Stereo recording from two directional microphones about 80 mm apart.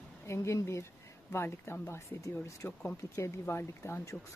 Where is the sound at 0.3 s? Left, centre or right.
Left.